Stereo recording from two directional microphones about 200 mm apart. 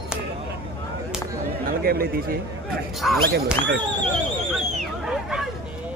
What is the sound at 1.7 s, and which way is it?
Speech, 50° right (ahead or behind).